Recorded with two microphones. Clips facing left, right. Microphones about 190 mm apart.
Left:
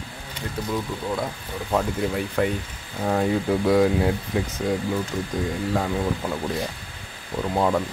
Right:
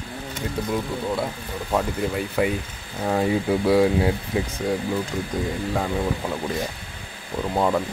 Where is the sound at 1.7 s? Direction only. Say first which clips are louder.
Even; centre (ahead or behind).